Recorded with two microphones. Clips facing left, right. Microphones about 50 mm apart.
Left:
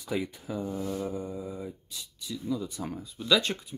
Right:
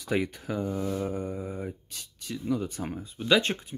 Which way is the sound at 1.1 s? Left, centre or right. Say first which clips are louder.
Right 2 dB; right.